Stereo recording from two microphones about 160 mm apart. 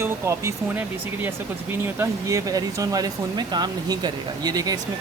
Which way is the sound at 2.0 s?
20° right (ahead or behind).